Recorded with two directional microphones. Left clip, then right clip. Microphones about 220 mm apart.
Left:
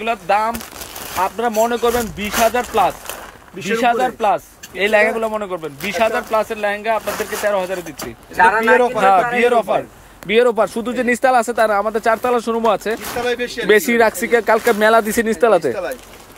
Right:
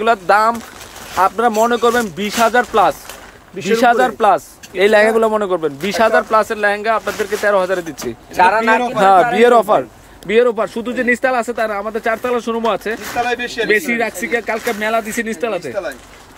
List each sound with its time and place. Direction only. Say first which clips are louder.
0.0 s speech: right 5 dB; 20° right (ahead or behind)
8.4 s a man's voice: even; 35° right (ahead or behind)
10.3 s speech: even; 5° left (ahead or behind)
13.7 s speech: left 4 dB; 15° left (ahead or behind)